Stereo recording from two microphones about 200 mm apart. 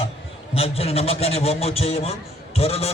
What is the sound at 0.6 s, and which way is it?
A man's voice, 30° left (ahead or behind).